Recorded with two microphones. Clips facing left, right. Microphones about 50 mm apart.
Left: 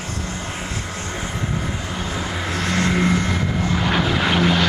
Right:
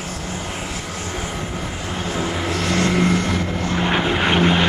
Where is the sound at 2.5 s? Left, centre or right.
Centre.